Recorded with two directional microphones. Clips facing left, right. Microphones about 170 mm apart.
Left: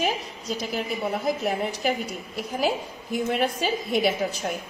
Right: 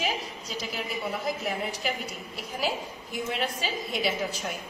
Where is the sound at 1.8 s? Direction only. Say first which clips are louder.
Left 7 dB; 50° left (ahead or behind).